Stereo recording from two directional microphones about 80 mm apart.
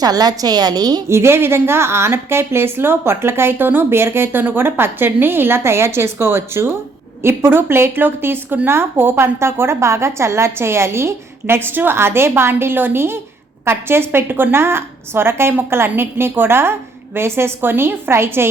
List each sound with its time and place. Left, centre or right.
0.0 s a woman's voice: right
1.0 s a woman's voice: right